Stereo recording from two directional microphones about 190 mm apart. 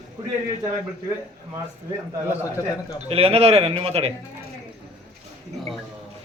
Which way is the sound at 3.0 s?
30° right (ahead or behind).